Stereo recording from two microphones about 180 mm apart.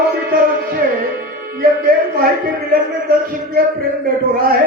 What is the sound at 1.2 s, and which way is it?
Speech, 55° right (ahead or behind).